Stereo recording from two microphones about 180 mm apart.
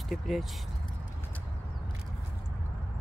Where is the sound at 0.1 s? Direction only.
Centre (ahead or behind).